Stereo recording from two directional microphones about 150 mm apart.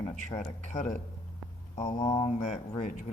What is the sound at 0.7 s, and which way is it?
Speech, 55° left (ahead or behind).